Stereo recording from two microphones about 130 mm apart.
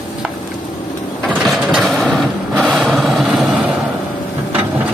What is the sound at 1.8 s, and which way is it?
Vehicle, centre (ahead or behind).